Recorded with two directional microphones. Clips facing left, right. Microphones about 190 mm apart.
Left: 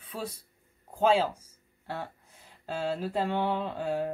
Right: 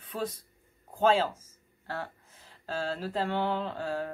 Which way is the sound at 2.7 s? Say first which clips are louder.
Left 2 dB; 15° left (ahead or behind).